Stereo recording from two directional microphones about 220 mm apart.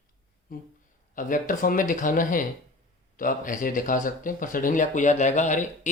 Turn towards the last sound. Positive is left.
turn(degrees=35)  # may be behind; listen again after turning